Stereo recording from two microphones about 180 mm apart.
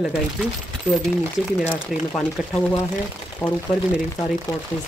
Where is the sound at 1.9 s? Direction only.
Centre (ahead or behind).